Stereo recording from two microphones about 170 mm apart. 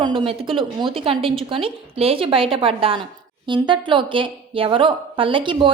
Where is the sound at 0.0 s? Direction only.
30° right (ahead or behind).